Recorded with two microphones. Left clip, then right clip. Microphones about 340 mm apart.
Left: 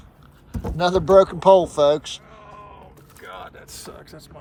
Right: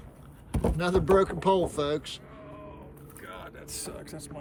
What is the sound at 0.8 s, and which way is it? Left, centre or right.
Speech, centre.